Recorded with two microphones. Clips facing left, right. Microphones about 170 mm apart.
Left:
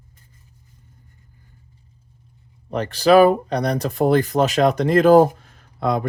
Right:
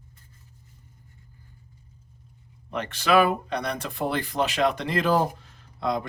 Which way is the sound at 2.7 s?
35° left (ahead or behind).